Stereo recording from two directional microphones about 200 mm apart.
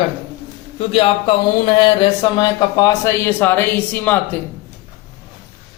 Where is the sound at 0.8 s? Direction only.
30° left (ahead or behind); by 4.4 s 10° left (ahead or behind).